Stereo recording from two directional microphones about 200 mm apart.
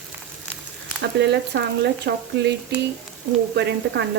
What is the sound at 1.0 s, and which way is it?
Frying, 55° right (ahead or behind).